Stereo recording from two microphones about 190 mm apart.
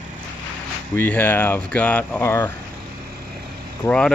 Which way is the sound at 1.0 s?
10° left (ahead or behind).